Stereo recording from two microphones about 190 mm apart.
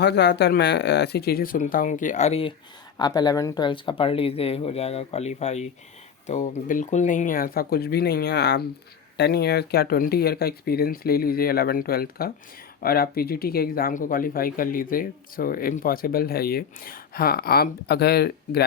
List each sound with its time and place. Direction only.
0.0 s speech: 60° left (ahead or behind); by 2.5 s 35° left (ahead or behind)
3.0 s speech: 20° left (ahead or behind); by 18.6 s 55° left (ahead or behind)